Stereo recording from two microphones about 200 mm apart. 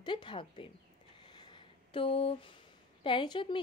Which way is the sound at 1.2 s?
25° left (ahead or behind).